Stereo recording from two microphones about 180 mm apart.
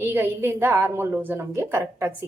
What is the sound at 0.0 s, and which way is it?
A woman's voice, 10° right (ahead or behind).